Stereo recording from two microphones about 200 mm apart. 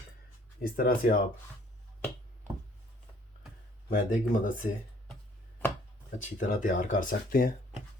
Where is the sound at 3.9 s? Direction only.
40° left (ahead or behind).